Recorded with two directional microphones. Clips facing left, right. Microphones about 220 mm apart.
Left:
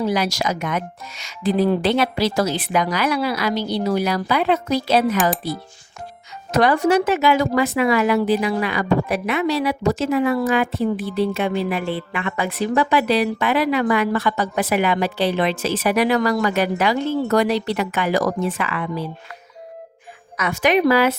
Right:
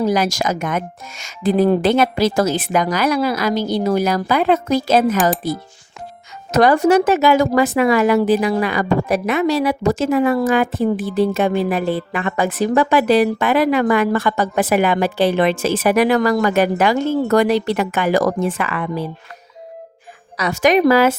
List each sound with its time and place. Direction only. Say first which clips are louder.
0.0 s speech: right 3 dB; 45° right (ahead or behind)
6.5 s speech: right 4 dB; 45° right (ahead or behind)
20.3 s speech: right 3 dB; 40° right (ahead or behind)